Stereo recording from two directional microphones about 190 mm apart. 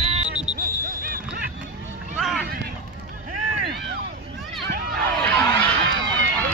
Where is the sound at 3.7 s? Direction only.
60° right (ahead or behind).